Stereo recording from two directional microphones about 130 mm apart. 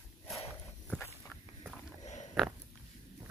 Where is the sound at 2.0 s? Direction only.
65° left (ahead or behind).